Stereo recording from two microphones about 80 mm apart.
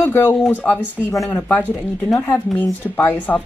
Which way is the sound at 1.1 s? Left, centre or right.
Left.